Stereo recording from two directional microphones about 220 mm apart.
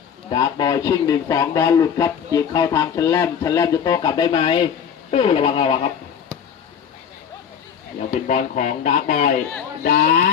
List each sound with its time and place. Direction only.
0.3 s a man's voice: 20° left (ahead or behind)
8.3 s speech: 35° left (ahead or behind)